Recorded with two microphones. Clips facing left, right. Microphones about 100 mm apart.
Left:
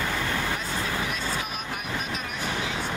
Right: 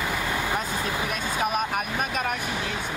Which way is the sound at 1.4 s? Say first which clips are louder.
Right 8 dB; 50° right (ahead or behind).